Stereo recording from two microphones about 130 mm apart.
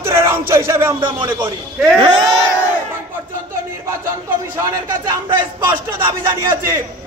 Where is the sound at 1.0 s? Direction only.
40° right (ahead or behind).